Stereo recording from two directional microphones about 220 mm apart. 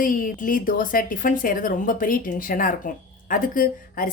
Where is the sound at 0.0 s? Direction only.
40° left (ahead or behind).